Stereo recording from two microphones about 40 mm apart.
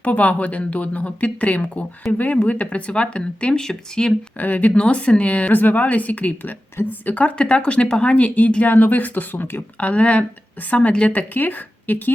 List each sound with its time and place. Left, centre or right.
0.0 s speech: left; by 4.1 s centre
4.4 s speech: left
7.3 s speech: left
8.7 s speech: left
9.7 s speech: left